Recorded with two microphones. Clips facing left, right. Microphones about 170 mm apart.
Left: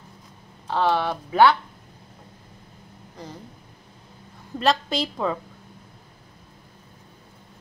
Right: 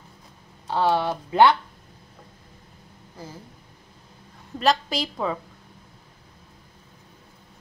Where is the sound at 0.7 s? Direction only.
10° right (ahead or behind).